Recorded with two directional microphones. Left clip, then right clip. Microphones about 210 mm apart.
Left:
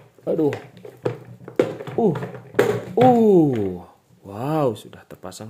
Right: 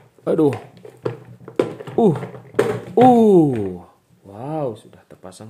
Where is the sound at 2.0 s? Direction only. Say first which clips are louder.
Right 4 dB; 30° right (ahead or behind).